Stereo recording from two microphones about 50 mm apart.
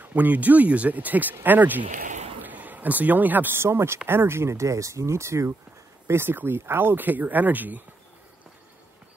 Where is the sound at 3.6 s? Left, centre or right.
Right.